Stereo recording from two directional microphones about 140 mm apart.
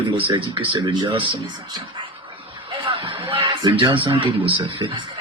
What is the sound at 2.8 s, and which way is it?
Speech, 35° right (ahead or behind).